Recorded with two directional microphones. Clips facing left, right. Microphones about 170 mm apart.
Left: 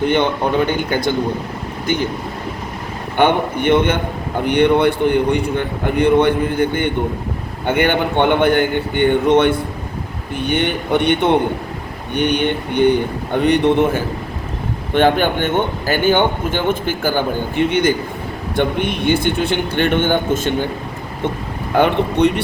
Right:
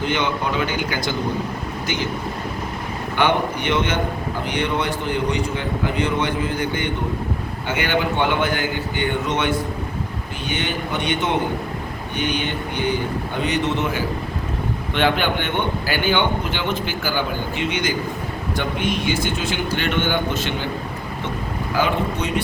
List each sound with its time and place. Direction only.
0.0 s a man's voice: 55° left (ahead or behind)
3.2 s a man's voice: 55° left (ahead or behind)
21.7 s a man's voice: 60° left (ahead or behind)